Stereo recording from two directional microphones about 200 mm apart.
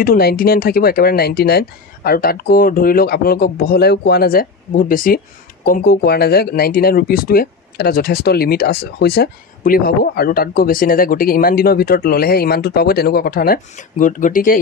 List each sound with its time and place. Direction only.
0.0 s speech: 50° left (ahead or behind)